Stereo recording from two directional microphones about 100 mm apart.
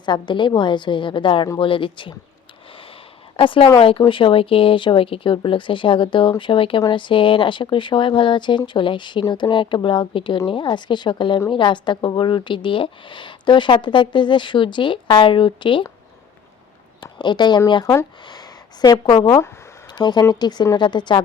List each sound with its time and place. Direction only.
0.0 s speech: 50° left (ahead or behind)
3.3 s speech: 60° left (ahead or behind)
17.0 s speech: 50° left (ahead or behind)
18.3 s a sound: 40° left (ahead or behind)
19.0 s speech: 60° left (ahead or behind)
19.9 s speech: 45° left (ahead or behind)